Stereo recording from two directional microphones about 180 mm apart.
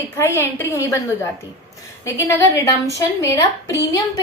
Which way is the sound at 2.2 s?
15° left (ahead or behind).